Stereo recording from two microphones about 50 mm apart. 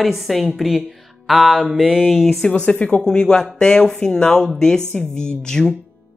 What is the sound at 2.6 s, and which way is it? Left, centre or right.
Speech, left.